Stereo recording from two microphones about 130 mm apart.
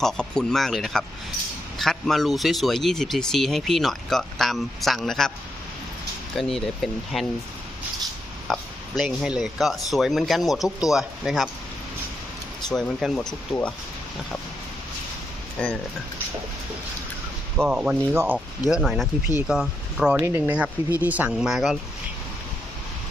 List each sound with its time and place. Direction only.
0.0 s speech: 5° left (ahead or behind)
6.3 s speech: centre (ahead or behind)
8.5 s speech: 5° left (ahead or behind)
12.7 s speech: 5° left (ahead or behind)
15.6 s speech: 10° left (ahead or behind)
17.7 s speech: 10° right (ahead or behind)
18.1 s speech: 20° right (ahead or behind)
18.7 s speech: centre (ahead or behind)